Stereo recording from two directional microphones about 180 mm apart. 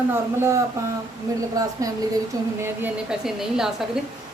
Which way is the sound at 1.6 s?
20° right (ahead or behind).